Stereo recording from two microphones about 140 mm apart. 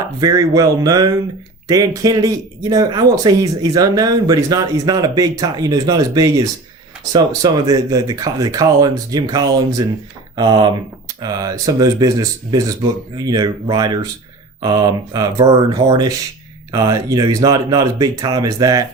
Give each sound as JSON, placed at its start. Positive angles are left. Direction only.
{"t": 0.2, "sound": "speech", "side_deg": -25}